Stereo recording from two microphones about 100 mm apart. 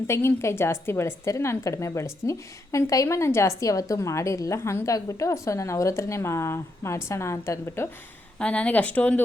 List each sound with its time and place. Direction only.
0.1 s a woman's voice: 25° left (ahead or behind)
8.4 s speech: 10° left (ahead or behind)